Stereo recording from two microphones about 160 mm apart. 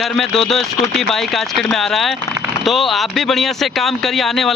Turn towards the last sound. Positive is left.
turn(degrees=0)  # may be behind; listen again after turning